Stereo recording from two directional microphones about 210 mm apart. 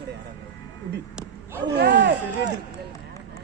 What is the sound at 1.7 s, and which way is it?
Speech, 55° right (ahead or behind).